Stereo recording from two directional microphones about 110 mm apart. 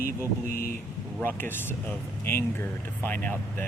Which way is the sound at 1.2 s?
20° left (ahead or behind).